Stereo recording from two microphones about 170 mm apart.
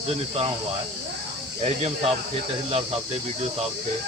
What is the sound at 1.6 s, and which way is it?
Speech, 40° right (ahead or behind).